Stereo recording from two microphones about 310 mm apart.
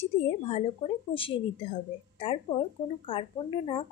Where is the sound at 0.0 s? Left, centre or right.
Centre.